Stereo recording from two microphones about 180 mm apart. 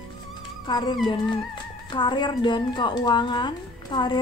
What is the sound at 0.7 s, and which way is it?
Speech, 25° left (ahead or behind).